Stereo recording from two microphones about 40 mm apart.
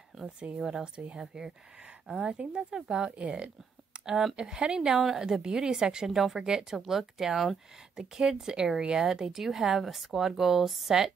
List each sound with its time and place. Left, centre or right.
0.6 s a woman's voice: centre
0.9 s speech: right
2.0 s a woman's voice: centre
3.2 s speech: right
4.0 s a woman's voice: centre
6.1 s speech: centre
6.4 s a woman's voice: centre